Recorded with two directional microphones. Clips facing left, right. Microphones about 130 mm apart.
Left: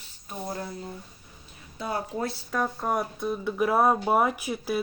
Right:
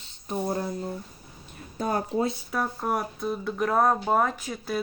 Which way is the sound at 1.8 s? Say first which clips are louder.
Right 4 dB; 45° right (ahead or behind).